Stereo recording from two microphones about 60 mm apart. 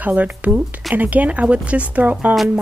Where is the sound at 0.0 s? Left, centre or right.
Right.